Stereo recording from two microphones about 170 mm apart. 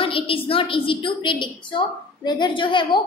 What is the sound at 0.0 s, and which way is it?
A woman's voice, 30° left (ahead or behind).